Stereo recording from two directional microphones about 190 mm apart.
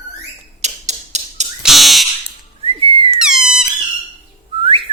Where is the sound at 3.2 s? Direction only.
5° right (ahead or behind).